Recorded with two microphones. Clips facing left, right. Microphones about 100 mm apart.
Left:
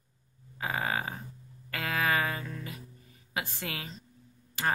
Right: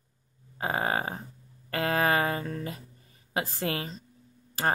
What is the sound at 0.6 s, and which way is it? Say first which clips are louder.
Speech: right 4 dB; 35° right (ahead or behind).